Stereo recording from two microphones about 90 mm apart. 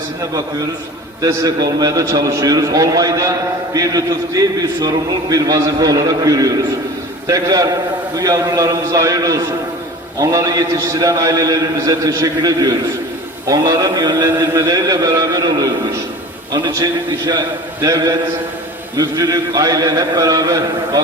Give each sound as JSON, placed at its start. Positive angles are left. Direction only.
{"t": 1.2, "sound": "a man's voice", "side_deg": -40}